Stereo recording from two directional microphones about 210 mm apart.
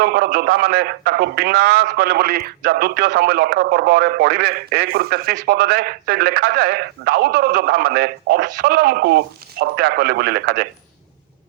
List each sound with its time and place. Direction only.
0.0 s a man's voice: 50° right (ahead or behind)